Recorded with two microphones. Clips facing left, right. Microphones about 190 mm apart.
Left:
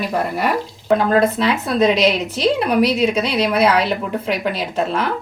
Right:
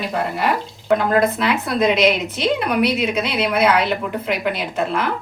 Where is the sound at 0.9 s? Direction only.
30° left (ahead or behind).